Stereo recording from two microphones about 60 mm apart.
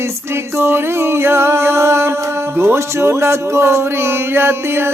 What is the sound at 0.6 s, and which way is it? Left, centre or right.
Speech, right.